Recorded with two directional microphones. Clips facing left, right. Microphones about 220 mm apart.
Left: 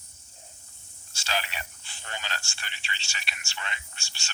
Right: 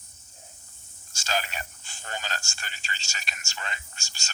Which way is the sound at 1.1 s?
45° right (ahead or behind).